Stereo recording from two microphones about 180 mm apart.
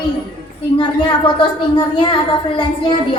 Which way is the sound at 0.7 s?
25° left (ahead or behind).